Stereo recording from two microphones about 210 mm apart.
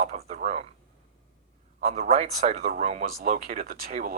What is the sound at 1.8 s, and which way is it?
Speech, 35° right (ahead or behind).